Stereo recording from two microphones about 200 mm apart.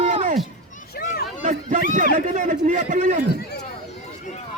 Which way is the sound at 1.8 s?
40° right (ahead or behind).